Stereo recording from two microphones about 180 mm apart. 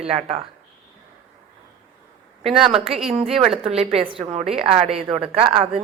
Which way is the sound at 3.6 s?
35° right (ahead or behind).